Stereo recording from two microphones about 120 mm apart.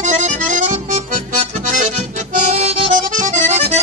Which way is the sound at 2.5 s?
65° right (ahead or behind).